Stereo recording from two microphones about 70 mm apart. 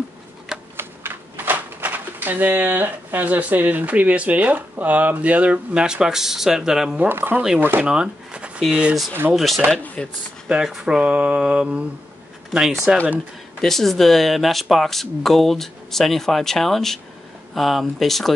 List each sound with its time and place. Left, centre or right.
0.7 s speech: right; by 7.0 s centre
7.0 s speech: right
7.8 s speech: centre
10.0 s speech: centre
10.6 s speech: centre
12.4 s speech: centre